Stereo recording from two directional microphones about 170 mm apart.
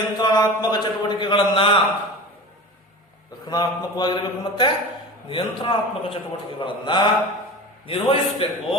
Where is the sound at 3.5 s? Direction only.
25° left (ahead or behind).